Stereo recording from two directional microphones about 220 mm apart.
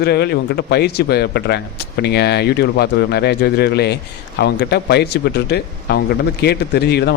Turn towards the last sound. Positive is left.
turn(degrees=50)  # may be behind; listen again after turning